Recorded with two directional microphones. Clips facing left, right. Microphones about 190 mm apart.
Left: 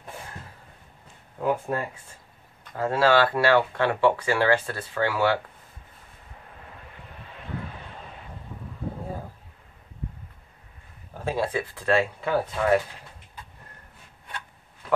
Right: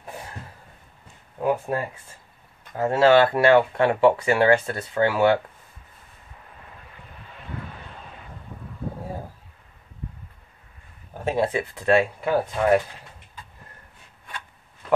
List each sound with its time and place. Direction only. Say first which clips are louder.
1.4 s speech: right 2 dB; 20° right (ahead or behind)
2.8 s speech: right 4 dB; 25° right (ahead or behind)
11.2 s speech: right 3 dB; 20° right (ahead or behind)